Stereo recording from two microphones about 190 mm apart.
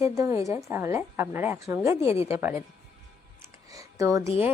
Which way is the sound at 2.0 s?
30° left (ahead or behind).